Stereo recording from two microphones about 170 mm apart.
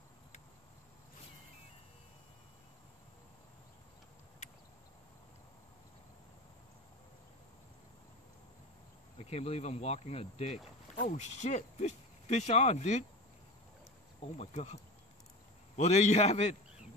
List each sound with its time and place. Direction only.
9.2 s speech: 35° left (ahead or behind)
14.3 s speech: 40° left (ahead or behind)